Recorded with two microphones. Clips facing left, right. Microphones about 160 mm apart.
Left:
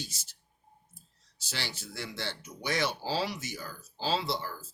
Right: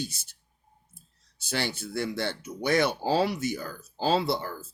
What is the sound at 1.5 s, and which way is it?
Speech, 55° right (ahead or behind).